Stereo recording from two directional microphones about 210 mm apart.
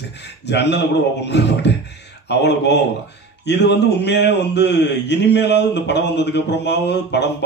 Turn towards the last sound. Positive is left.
turn(degrees=55)  # may be behind; listen again after turning